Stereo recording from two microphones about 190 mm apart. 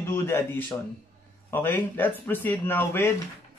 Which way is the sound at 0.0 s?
10° left (ahead or behind).